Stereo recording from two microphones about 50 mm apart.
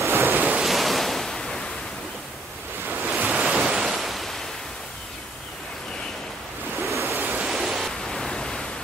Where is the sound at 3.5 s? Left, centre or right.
Centre.